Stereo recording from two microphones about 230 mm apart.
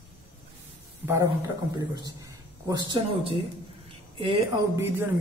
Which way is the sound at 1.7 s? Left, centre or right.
Centre.